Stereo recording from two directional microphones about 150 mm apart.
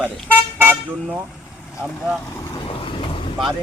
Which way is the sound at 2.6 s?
35° left (ahead or behind).